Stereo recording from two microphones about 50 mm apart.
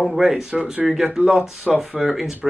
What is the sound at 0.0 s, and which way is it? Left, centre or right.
Speech, centre.